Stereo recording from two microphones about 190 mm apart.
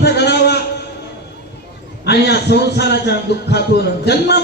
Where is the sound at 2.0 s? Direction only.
60° left (ahead or behind).